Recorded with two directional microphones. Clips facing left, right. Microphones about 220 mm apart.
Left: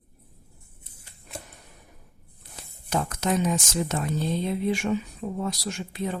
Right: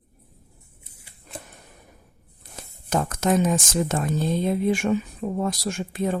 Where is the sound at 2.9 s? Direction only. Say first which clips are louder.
Right 4 dB; 50° right (ahead or behind).